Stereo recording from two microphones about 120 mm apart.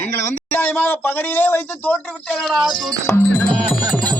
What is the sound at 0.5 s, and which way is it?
Speech, 15° left (ahead or behind).